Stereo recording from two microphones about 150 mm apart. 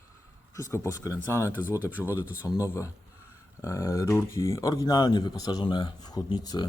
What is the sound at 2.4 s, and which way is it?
Speech, 20° left (ahead or behind).